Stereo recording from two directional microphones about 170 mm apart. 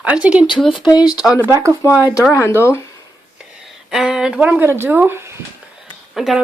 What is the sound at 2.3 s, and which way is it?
Speech, 15° left (ahead or behind).